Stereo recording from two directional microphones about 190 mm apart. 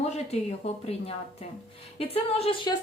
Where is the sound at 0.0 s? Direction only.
35° left (ahead or behind).